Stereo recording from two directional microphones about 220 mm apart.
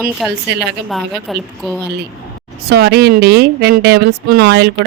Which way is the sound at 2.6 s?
50° right (ahead or behind).